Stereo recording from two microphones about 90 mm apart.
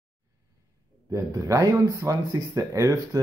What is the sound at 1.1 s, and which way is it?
Speech, 35° right (ahead or behind).